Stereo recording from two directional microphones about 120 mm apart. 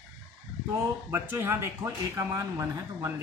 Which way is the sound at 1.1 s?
20° right (ahead or behind).